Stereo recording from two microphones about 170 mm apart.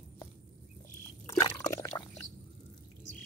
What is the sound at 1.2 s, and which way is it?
Liquid, 15° left (ahead or behind).